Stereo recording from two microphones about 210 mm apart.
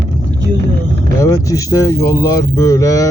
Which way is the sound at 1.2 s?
15° left (ahead or behind).